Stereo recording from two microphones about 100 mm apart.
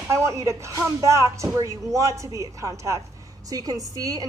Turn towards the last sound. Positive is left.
turn(degrees=-35)  # may be behind; listen again after turning